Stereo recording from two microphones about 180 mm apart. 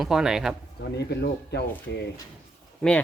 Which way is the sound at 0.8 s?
65° left (ahead or behind).